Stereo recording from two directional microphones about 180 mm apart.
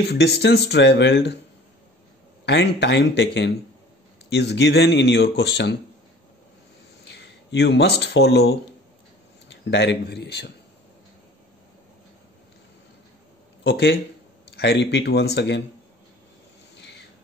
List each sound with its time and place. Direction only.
0.1 s speech: 65° left (ahead or behind)
2.4 s speech: 75° left (ahead or behind)
7.1 s speech: 70° left (ahead or behind)
9.5 s speech: 80° left
13.7 s speech: 80° left
16.7 s a sound: 75° left (ahead or behind)